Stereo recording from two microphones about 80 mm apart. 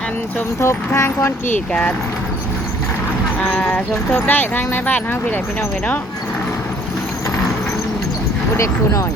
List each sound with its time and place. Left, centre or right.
0.6 s speech: left
3.5 s speech: centre
8.5 s speech: left